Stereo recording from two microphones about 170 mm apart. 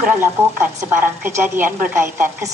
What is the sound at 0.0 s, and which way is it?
A woman's voice, 10° right (ahead or behind).